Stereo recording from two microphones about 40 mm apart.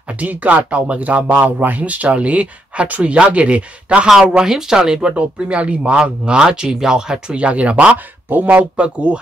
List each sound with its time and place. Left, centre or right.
0.2 s speech: right
4.3 s speech: centre
7.3 s speech: right